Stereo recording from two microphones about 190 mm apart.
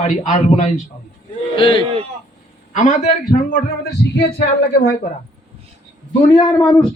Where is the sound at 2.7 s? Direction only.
40° left (ahead or behind).